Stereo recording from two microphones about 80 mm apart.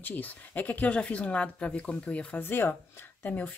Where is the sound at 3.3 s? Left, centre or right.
Centre.